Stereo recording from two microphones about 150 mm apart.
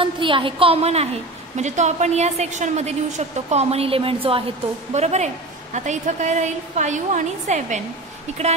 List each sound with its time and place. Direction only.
0.0 s a woman's voice: 35° right (ahead or behind)
4.9 s a woman's voice: 50° right (ahead or behind)